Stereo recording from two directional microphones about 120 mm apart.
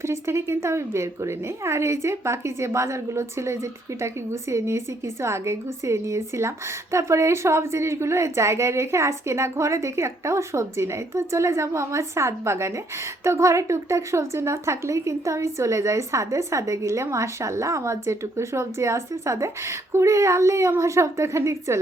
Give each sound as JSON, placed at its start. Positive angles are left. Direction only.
{"t": 0.0, "sound": "a woman's voice", "side_deg": -20}